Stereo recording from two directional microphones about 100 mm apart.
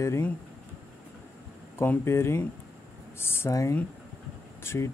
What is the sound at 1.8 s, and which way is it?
Speech, 25° left (ahead or behind).